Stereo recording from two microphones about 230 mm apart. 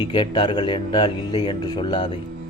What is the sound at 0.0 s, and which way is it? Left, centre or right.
Speech, centre.